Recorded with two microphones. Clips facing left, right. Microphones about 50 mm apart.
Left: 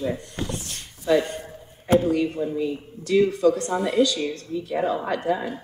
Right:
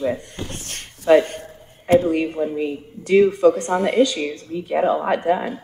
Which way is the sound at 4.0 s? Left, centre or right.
Right.